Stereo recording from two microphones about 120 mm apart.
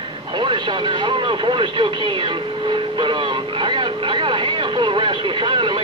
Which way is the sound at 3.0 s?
40° right (ahead or behind).